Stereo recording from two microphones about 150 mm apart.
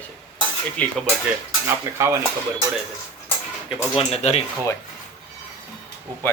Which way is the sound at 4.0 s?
45° left (ahead or behind).